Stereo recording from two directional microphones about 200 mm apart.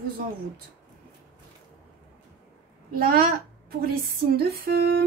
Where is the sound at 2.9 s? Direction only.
50° right (ahead or behind).